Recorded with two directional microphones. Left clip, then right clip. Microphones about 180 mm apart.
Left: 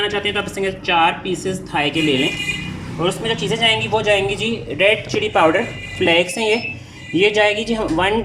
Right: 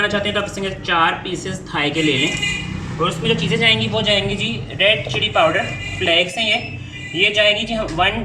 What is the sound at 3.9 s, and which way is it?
Speech, 35° left (ahead or behind).